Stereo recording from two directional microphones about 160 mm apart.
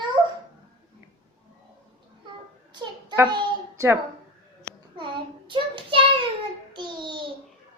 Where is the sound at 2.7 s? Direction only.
25° right (ahead or behind).